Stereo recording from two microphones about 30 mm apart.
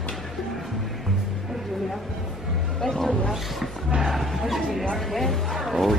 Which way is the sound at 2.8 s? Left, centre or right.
Centre.